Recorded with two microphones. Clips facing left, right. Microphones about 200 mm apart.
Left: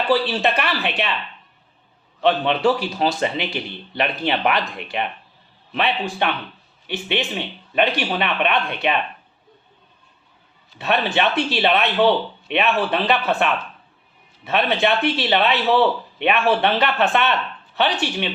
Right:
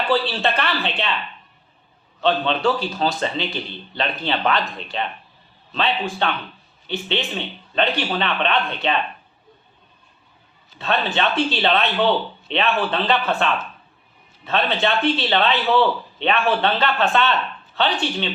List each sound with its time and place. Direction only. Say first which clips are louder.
0.1 s a man's voice: left 2 dB; 15° left (ahead or behind)
2.2 s a man's voice: left 2 dB; 15° left (ahead or behind)
10.8 s a man's voice: left 2 dB; 15° left (ahead or behind)